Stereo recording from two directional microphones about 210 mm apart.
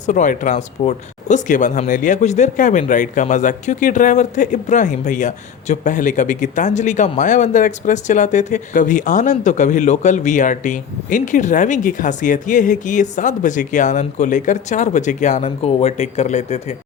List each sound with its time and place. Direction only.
0.0 s speech: 35° left (ahead or behind)